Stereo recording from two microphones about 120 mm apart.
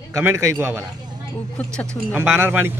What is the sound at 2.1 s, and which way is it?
Speech, 20° right (ahead or behind).